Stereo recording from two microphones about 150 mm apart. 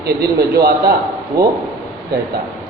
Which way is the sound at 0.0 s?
90° right.